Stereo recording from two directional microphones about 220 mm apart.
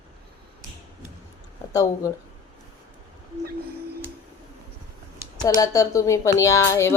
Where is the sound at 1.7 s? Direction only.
15° left (ahead or behind).